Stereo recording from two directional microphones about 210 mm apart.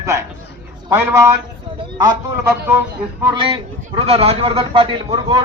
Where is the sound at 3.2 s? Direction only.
25° right (ahead or behind).